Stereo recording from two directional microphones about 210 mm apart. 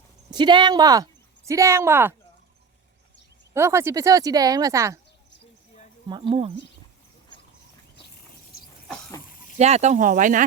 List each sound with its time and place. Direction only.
0.3 s speech: 20° right (ahead or behind)
3.5 s speech: 10° right (ahead or behind)
6.1 s speech: 20° right (ahead or behind)
9.6 s speech: 30° right (ahead or behind)